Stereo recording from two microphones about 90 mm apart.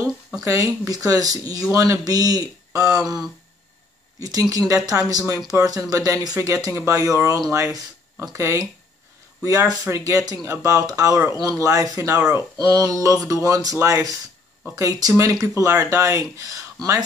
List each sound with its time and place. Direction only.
0.4 s speech: 40° right (ahead or behind)
4.2 s speech: 40° right (ahead or behind)